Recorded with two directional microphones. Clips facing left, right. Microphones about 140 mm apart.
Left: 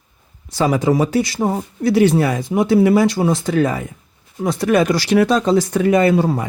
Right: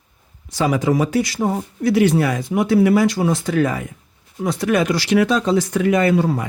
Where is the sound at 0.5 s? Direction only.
30° left (ahead or behind).